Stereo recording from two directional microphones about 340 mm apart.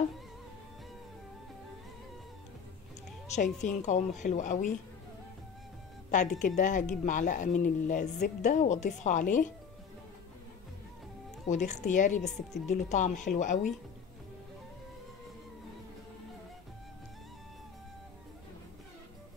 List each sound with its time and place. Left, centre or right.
3.6 s speech: left
6.0 s music: left
6.4 s speech: left
11.4 s speech: left
12.2 s speech: centre
12.6 s speech: left